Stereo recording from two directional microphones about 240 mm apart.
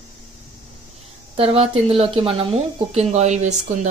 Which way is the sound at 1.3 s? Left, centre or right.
Right.